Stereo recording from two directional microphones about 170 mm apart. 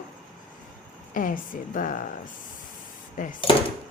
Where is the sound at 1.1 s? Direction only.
55° left (ahead or behind).